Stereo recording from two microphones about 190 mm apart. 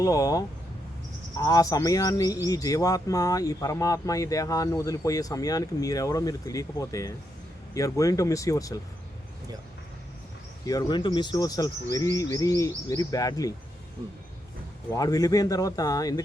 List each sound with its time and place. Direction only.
0.0 s speech: 20° left (ahead or behind)
10.7 s speech: 20° left (ahead or behind)
14.9 s speech: 20° left (ahead or behind)